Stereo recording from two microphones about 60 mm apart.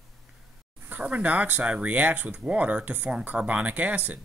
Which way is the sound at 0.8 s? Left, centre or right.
Right.